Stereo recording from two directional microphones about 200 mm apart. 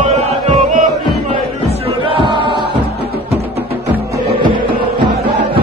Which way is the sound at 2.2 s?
25° right (ahead or behind).